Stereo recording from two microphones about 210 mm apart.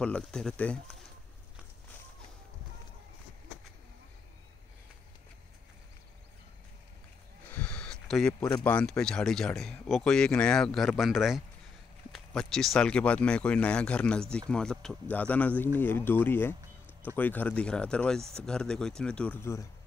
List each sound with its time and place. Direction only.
0.0 s speech: 5° left (ahead or behind)
7.4 s a sound: 5° left (ahead or behind)
8.6 s speech: 5° left (ahead or behind)